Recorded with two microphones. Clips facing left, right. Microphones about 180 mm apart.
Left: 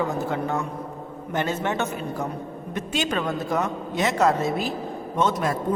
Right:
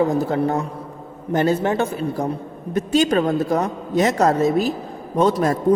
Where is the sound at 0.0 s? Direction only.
35° right (ahead or behind).